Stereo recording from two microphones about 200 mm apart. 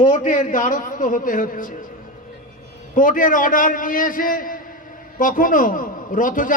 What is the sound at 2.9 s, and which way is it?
A man's voice, 40° left (ahead or behind).